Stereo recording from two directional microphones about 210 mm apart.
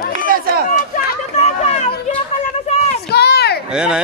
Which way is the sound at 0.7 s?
45° left (ahead or behind).